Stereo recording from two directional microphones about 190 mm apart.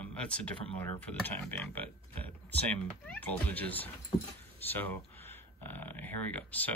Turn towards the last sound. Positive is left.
turn(degrees=10)  # may be behind; listen again after turning